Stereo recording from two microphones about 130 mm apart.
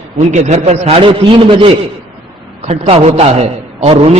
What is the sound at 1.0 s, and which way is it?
A man's voice, 40° right (ahead or behind).